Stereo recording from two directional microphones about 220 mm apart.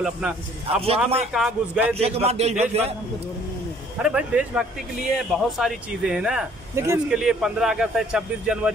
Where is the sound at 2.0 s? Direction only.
25° right (ahead or behind).